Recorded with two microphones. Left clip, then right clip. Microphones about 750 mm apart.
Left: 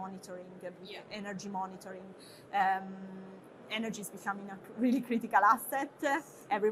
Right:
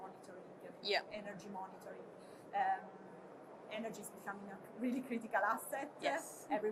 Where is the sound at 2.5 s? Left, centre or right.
Left.